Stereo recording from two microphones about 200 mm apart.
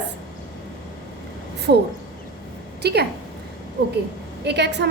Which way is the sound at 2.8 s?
55° right (ahead or behind).